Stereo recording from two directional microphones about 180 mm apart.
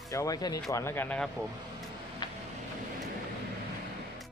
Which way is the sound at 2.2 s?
25° left (ahead or behind).